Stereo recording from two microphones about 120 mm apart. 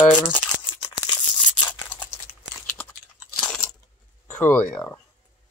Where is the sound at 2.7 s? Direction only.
20° left (ahead or behind).